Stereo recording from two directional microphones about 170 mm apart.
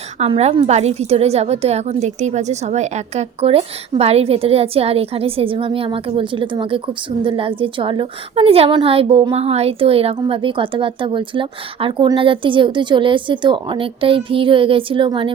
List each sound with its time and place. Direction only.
0.2 s a woman's voice: 40° right (ahead or behind)